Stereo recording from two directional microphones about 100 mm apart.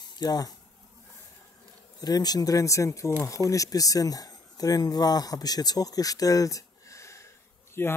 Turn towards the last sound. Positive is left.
turn(degrees=25)  # may be behind; listen again after turning